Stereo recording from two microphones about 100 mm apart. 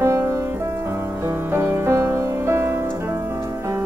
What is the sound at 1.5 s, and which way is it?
Music, 25° right (ahead or behind).